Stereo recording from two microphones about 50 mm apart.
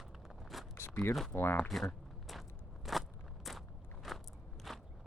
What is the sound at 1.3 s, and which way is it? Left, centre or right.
Speech, left.